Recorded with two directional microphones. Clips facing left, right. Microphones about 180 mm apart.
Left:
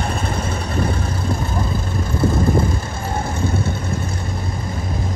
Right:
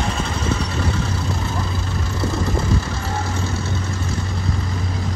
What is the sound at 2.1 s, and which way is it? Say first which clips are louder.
Vehicle: left 6 dB; 55° left (ahead or behind).